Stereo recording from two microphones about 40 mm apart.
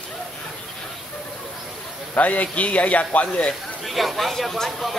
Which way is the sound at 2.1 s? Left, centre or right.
Left.